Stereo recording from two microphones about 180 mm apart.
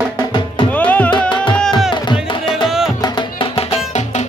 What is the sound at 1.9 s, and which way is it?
Music, 25° left (ahead or behind).